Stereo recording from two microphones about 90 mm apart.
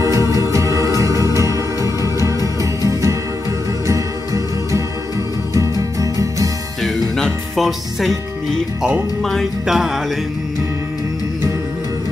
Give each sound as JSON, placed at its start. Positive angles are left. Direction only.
{"t": 0.3, "sound": "organ", "side_deg": -35}
{"t": 2.1, "sound": "music", "side_deg": -35}
{"t": 6.8, "sound": "music", "side_deg": 5}